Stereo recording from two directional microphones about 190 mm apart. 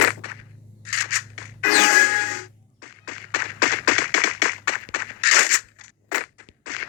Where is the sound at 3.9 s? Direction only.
50° left (ahead or behind).